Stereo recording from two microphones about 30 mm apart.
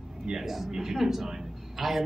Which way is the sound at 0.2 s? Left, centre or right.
Right.